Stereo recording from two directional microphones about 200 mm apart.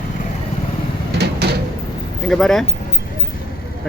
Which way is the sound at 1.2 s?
55° right (ahead or behind).